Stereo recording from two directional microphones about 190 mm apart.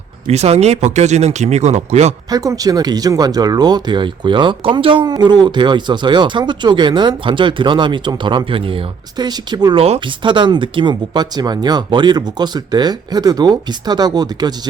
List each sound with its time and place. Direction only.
0.3 s speech: 35° right (ahead or behind)
2.3 s speech: 20° right (ahead or behind)